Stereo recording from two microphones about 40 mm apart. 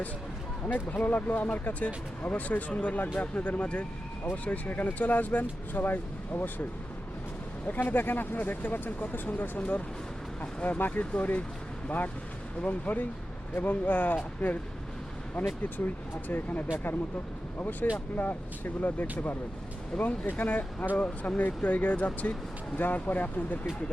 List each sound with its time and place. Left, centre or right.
0.7 s speech: left
7.7 s speech: left
10.6 s speech: left
15.4 s speech: left
16.3 s speech: left
17.6 s speech: left
22.8 s speech: left